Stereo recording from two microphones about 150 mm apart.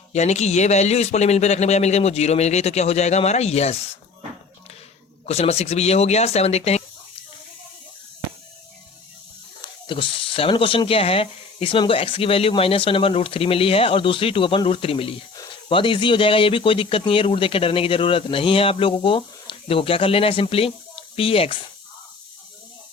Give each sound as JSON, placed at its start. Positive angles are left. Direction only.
{"t": 0.1, "sound": "speech", "side_deg": 50}
{"t": 5.2, "sound": "speech", "side_deg": 45}
{"t": 9.6, "sound": "speech", "side_deg": 35}